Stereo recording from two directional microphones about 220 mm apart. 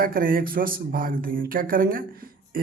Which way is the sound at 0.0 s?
40° right (ahead or behind).